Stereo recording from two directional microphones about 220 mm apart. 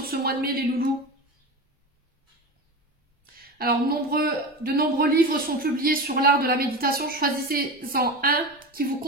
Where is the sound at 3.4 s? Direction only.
45° right (ahead or behind).